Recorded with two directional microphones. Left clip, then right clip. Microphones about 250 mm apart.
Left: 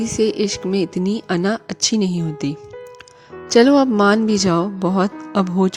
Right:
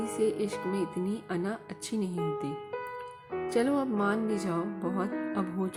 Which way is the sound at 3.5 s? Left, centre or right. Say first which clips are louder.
Left 17 dB; left.